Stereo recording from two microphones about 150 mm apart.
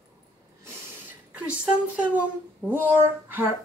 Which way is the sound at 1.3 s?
10° right (ahead or behind).